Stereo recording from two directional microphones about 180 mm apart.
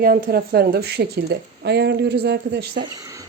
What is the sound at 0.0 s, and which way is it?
A woman's voice, 55° right (ahead or behind).